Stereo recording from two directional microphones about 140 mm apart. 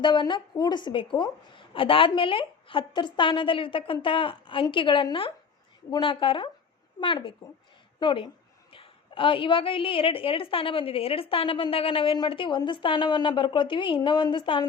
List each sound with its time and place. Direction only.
0.0 s a woman's voice: 35° left (ahead or behind)